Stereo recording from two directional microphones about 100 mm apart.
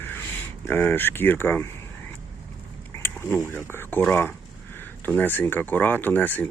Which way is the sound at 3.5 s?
20° left (ahead or behind).